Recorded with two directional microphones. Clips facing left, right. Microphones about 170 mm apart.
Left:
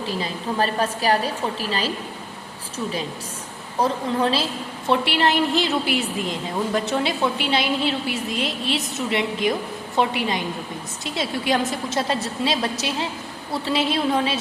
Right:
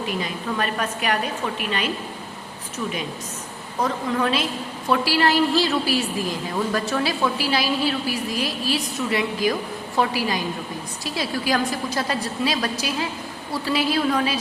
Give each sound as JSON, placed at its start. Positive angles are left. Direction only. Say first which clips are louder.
{"t": 0.0, "sound": "a woman's voice", "louder": "even", "side_deg": 30}